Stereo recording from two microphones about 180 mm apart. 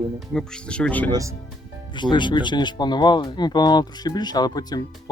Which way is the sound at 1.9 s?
25° left (ahead or behind).